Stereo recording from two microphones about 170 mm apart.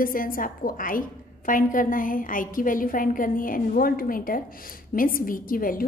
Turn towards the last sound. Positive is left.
turn(degrees=55)  # may be behind; listen again after turning